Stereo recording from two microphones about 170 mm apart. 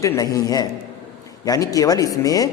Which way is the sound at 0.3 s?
20° left (ahead or behind).